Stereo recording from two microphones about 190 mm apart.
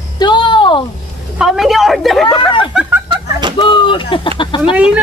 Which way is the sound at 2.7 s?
10° right (ahead or behind).